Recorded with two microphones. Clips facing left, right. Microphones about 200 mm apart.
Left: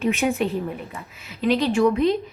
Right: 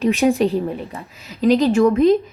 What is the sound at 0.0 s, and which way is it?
A woman's voice, 35° right (ahead or behind).